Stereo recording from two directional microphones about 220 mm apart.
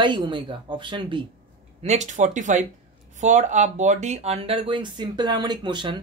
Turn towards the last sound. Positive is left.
turn(degrees=-20)  # may be behind; listen again after turning